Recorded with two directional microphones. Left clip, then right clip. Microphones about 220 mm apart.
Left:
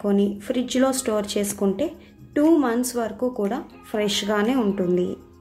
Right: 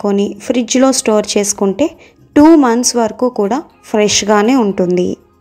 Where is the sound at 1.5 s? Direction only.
20° right (ahead or behind).